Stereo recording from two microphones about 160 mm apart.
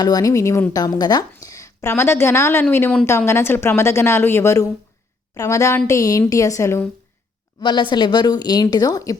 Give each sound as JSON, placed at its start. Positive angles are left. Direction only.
{"t": 0.0, "sound": "a woman's voice", "side_deg": 25}
{"t": 7.6, "sound": "a woman's voice", "side_deg": 30}